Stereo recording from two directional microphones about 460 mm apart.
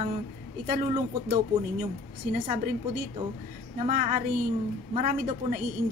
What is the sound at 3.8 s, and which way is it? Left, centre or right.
A woman's voice, centre.